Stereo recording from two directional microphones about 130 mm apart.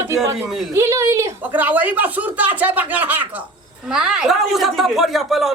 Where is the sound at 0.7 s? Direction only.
20° right (ahead or behind).